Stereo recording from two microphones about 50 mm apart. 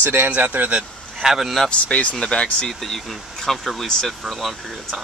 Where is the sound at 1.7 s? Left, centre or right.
Left.